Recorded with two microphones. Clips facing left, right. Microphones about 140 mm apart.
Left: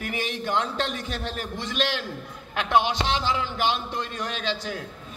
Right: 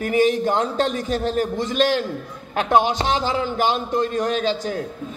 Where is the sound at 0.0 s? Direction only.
40° right (ahead or behind).